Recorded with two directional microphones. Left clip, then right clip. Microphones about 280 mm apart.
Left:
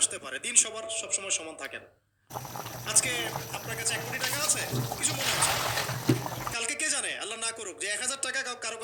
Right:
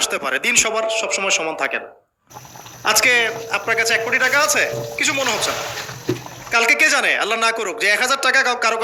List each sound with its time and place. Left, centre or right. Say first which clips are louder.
0.0 s a man's voice: right 14 dB; right
2.8 s a man's voice: right 16 dB; right
6.5 s a man's voice: right 19 dB; right